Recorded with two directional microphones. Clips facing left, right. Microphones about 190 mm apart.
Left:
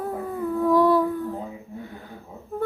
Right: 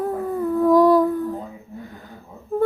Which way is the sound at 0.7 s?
45° right (ahead or behind).